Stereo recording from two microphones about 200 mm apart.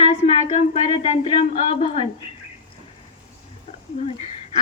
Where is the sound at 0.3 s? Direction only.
30° left (ahead or behind).